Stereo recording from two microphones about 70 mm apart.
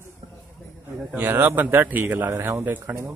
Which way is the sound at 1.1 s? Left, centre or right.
Right.